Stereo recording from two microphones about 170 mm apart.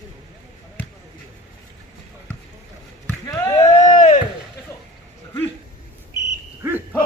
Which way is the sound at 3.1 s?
15° left (ahead or behind).